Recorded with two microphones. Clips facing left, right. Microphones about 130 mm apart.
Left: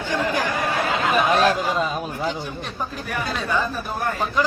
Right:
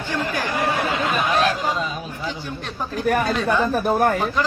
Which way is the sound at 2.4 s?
10° left (ahead or behind).